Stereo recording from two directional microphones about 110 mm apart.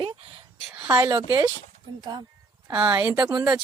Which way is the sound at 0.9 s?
30° right (ahead or behind).